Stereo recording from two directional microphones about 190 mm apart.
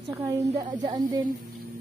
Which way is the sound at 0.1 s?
15° right (ahead or behind).